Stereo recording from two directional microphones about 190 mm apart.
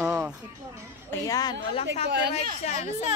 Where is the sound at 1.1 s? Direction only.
15° left (ahead or behind).